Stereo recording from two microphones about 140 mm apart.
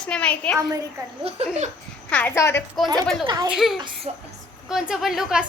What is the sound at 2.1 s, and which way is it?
Speech, 15° left (ahead or behind).